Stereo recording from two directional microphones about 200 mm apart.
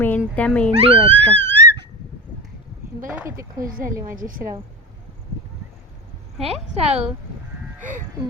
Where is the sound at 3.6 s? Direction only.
45° right (ahead or behind).